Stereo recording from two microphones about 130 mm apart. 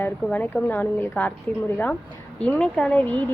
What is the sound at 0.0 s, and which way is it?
A woman's voice, 15° left (ahead or behind).